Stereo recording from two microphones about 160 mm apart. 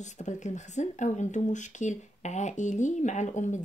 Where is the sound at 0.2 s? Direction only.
50° left (ahead or behind).